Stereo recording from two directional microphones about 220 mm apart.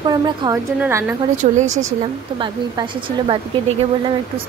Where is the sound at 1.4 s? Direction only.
35° right (ahead or behind).